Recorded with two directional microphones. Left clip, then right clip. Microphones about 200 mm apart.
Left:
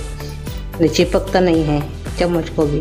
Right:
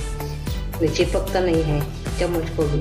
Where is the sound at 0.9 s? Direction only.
55° left (ahead or behind).